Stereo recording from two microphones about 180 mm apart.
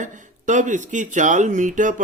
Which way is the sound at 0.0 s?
45° right (ahead or behind).